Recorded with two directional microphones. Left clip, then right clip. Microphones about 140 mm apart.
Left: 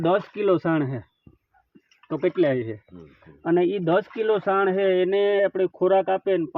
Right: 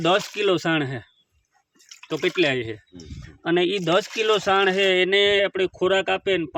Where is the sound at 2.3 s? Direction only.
30° left (ahead or behind).